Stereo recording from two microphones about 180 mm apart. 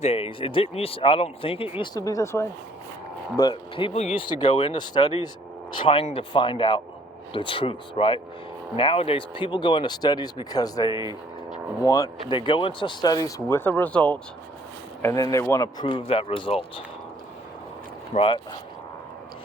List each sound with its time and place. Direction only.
0.0 s speech: 30° left (ahead or behind)
16.0 s speech: 30° left (ahead or behind)
18.1 s speech: 30° left (ahead or behind)